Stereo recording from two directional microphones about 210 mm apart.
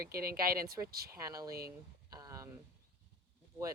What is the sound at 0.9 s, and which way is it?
Speech, 45° right (ahead or behind).